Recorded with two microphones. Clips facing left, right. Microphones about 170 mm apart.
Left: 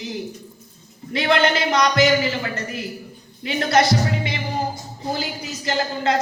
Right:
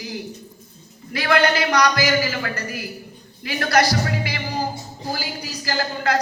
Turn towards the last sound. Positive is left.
turn(degrees=25)  # may be behind; listen again after turning